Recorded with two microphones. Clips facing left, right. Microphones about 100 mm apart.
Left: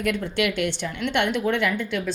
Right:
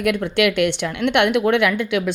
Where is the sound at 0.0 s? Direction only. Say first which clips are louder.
Right 6 dB; 65° right (ahead or behind).